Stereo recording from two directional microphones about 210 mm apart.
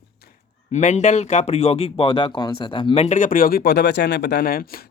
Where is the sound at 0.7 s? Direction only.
35° left (ahead or behind).